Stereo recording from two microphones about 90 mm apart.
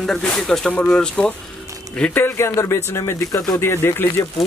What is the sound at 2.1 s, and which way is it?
Speech, 25° left (ahead or behind).